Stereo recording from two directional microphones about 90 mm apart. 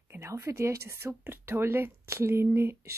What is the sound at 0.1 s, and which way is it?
Speech, 30° right (ahead or behind).